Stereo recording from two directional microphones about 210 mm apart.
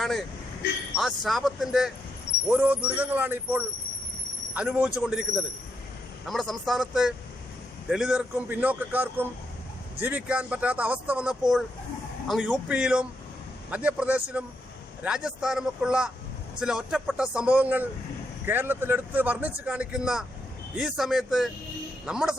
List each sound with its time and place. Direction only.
0.9 s speech: centre (ahead or behind)